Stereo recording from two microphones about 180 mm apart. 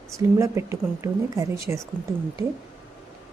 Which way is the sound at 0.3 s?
15° right (ahead or behind).